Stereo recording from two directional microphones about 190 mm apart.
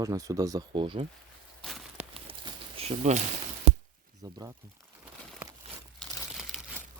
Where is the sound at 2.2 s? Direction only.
30° right (ahead or behind).